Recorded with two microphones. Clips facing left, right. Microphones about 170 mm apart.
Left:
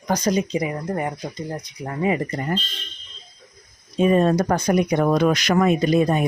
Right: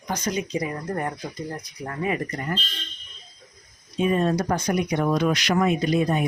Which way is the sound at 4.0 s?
40° left (ahead or behind).